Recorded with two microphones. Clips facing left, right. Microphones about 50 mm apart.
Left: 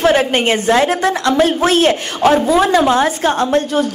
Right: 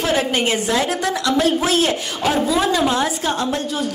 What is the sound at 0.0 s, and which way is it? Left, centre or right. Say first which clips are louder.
A woman's voice: left 6 dB; left.